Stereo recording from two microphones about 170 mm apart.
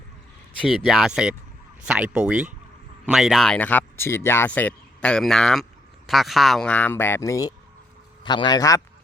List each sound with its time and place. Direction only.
0.7 s a man's voice: centre (ahead or behind); by 8.8 s 20° left (ahead or behind)